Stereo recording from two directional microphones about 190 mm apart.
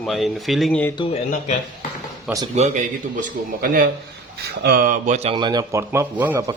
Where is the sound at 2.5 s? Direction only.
35° right (ahead or behind).